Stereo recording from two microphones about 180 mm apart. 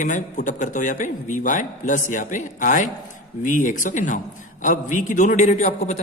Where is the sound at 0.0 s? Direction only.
45° left (ahead or behind).